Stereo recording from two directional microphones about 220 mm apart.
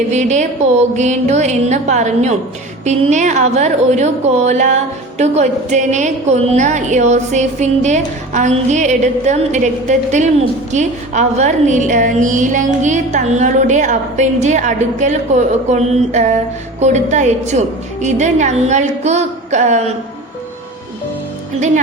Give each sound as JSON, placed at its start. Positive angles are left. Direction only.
{"t": 0.1, "sound": "a woman's voice", "side_deg": -30}